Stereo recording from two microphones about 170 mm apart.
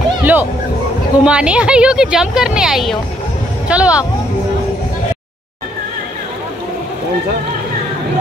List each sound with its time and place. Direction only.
0.2 s music: 10° right (ahead or behind)
1.2 s speech: 5° right (ahead or behind)